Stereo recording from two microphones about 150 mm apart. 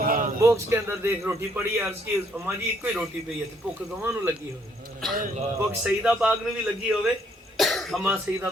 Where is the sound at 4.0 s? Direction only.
15° right (ahead or behind).